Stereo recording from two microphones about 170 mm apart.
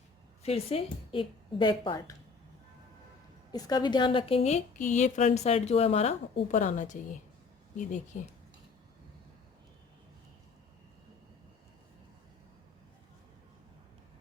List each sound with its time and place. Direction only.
0.4 s a woman's voice: 35° left (ahead or behind)
3.5 s a woman's voice: 25° left (ahead or behind); by 8.2 s 45° left (ahead or behind)